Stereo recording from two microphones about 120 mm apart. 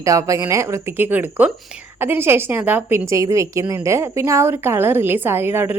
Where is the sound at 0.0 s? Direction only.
25° right (ahead or behind).